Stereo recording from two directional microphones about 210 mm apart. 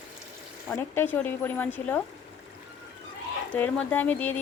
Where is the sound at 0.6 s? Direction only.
10° left (ahead or behind).